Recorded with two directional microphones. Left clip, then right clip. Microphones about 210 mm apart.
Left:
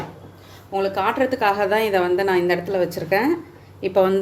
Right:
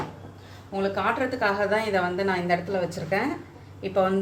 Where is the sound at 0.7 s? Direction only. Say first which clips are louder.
Left 5 dB; 50° left (ahead or behind).